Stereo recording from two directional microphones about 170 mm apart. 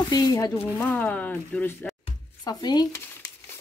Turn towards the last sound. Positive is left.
turn(degrees=20)  # may be behind; listen again after turning